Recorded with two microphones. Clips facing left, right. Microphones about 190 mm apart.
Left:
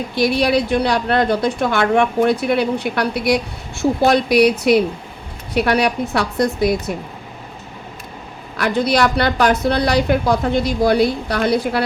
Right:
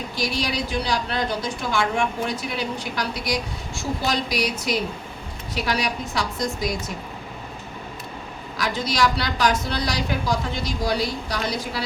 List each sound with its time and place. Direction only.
0.2 s a woman's voice: 60° left (ahead or behind)
8.5 s a woman's voice: 60° left (ahead or behind)